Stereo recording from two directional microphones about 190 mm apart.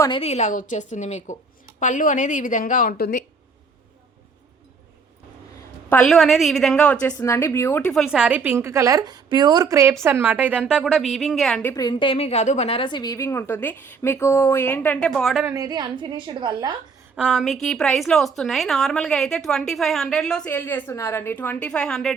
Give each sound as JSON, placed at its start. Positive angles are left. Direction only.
{"t": 0.0, "sound": "a woman's voice", "side_deg": 25}
{"t": 5.9, "sound": "a woman's voice", "side_deg": 5}
{"t": 11.7, "sound": "a woman's voice", "side_deg": 20}
{"t": 15.4, "sound": "a woman's voice", "side_deg": -20}
{"t": 17.2, "sound": "a woman's voice", "side_deg": -5}